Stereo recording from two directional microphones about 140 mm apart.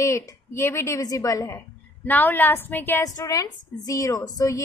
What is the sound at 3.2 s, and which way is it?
A woman's voice, 25° left (ahead or behind).